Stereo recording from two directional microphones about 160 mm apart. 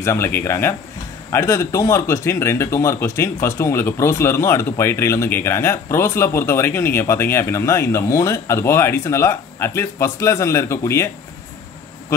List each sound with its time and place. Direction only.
0.0 s speech: 15° left (ahead or behind)